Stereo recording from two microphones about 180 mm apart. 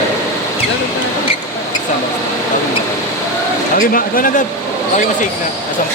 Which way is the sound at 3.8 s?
50° left (ahead or behind).